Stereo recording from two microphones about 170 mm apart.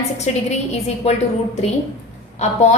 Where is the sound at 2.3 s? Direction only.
40° left (ahead or behind).